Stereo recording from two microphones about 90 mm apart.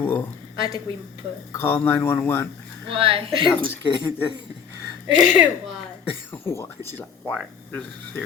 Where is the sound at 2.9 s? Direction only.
90° right.